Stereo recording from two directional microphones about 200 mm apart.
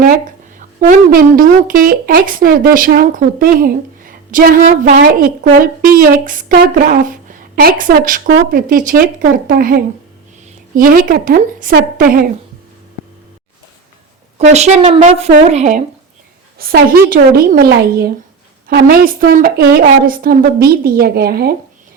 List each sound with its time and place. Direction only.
0.8 s a woman's voice: 45° right (ahead or behind)
14.3 s a woman's voice: 35° right (ahead or behind)
16.6 s a woman's voice: 50° right (ahead or behind)